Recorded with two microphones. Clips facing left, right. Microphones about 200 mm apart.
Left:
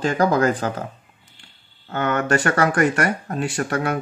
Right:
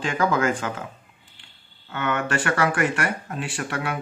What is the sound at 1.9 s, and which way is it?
Speech, 40° left (ahead or behind).